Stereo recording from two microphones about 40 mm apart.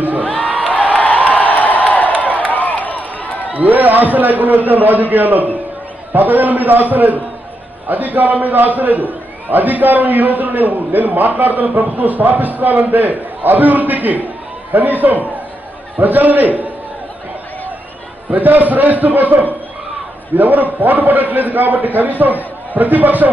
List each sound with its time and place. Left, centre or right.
0.4 s music: right
0.7 s a sound: left
3.5 s a man's voice: right
18.3 s a man's voice: right